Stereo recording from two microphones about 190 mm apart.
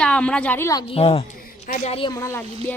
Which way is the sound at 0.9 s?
30° left (ahead or behind).